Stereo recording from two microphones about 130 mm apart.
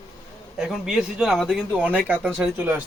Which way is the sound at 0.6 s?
5° right (ahead or behind).